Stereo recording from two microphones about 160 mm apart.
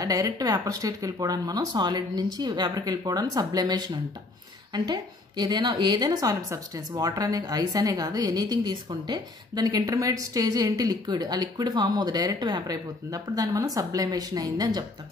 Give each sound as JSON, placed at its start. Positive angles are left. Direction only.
{"t": 0.0, "sound": "a woman's voice", "side_deg": -20}